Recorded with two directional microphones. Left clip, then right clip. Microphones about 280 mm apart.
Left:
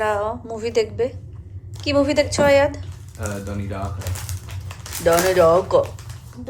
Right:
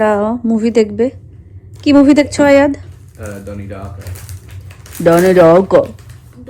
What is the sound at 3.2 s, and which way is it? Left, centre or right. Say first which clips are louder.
Speech: right 2 dB; centre.